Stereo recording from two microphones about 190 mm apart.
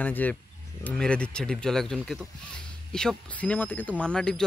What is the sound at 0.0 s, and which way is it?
Speech, 10° left (ahead or behind).